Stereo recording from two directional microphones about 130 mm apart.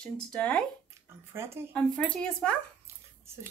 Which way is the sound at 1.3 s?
20° right (ahead or behind).